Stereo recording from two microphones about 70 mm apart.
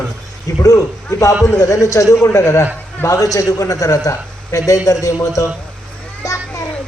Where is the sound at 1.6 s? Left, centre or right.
Left.